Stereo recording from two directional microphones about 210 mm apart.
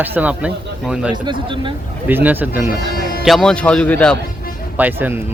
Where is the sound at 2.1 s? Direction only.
10° right (ahead or behind).